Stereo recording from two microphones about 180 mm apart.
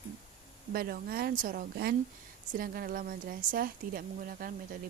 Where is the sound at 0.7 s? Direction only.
55° right (ahead or behind).